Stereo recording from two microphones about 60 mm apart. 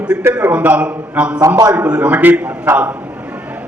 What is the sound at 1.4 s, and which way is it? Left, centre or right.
Speech, right.